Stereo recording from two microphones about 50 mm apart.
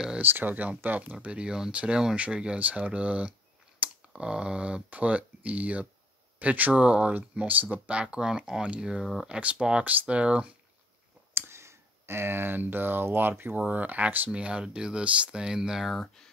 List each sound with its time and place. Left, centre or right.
0.2 s speech: right
1.2 s speech: right
3.8 s a sound: right
4.2 s speech: centre
8.0 s speech: centre
9.0 s speech: centre
9.3 s speech: right
11.3 s speech: right
13.7 s speech: right
14.3 s speech: right